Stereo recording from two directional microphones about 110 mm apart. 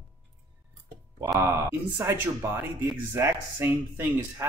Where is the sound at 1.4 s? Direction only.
25° right (ahead or behind).